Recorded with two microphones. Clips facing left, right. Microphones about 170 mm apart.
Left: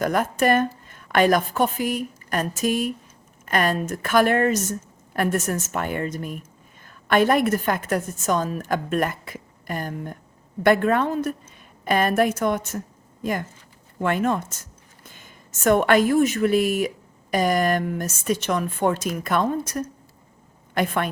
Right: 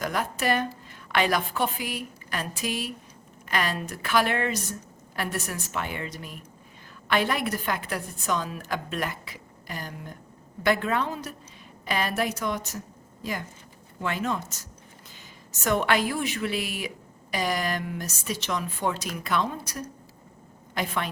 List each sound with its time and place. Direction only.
0.0 s a woman's voice: 50° left (ahead or behind)